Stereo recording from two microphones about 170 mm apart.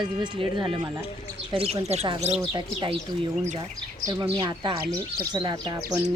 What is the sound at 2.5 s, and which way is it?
Speech, 30° right (ahead or behind).